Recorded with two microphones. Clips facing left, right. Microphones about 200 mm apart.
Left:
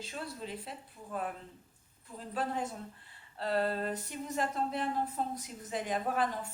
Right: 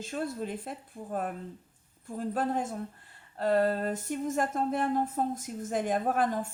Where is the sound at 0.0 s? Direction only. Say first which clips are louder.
Right 8 dB; 50° right (ahead or behind).